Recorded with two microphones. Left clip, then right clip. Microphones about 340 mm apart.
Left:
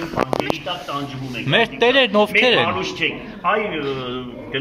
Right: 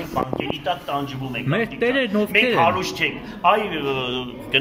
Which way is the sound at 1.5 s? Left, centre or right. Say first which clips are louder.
Left 6 dB; centre.